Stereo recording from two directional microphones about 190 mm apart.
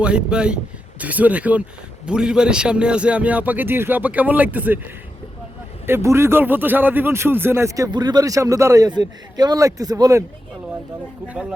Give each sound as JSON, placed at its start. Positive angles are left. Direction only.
{"t": 0.0, "sound": "speech", "side_deg": -5}
{"t": 5.8, "sound": "speech", "side_deg": -15}